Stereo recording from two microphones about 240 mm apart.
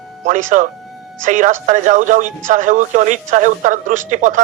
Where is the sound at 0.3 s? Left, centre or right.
Right.